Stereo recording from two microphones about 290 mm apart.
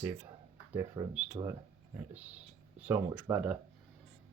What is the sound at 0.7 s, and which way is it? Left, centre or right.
Speech, centre.